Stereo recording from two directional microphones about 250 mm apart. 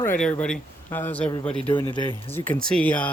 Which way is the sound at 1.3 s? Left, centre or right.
Centre.